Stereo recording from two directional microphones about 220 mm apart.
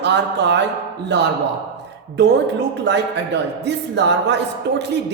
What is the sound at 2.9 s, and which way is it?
A woman's voice, 50° right (ahead or behind).